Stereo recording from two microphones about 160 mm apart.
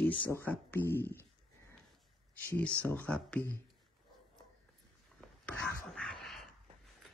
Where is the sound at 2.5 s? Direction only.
10° left (ahead or behind).